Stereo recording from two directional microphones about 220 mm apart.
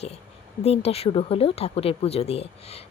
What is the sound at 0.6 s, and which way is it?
Speech, 30° left (ahead or behind).